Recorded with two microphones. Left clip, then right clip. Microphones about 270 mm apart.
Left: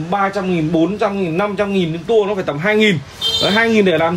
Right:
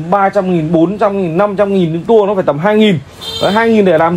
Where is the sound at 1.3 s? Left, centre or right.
Centre.